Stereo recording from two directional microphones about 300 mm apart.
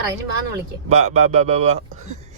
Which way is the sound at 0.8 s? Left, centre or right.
Right.